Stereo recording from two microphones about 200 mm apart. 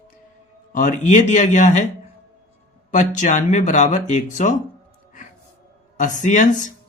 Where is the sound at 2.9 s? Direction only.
40° left (ahead or behind).